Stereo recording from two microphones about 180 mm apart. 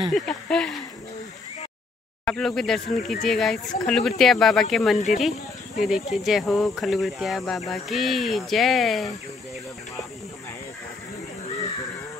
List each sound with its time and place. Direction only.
0.1 s speech: 5° left (ahead or behind)
2.2 s speech: 5° left (ahead or behind)
4.9 s speech: 40° left (ahead or behind)
5.8 s speech: centre (ahead or behind)